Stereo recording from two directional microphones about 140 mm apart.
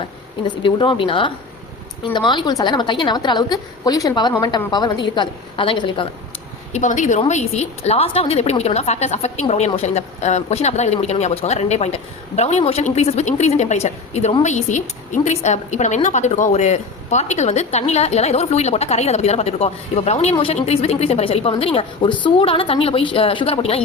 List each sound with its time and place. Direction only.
0.4 s a woman's voice: 35° left (ahead or behind)
6.7 s a woman's voice: 60° left (ahead or behind); by 23.8 s 45° left (ahead or behind)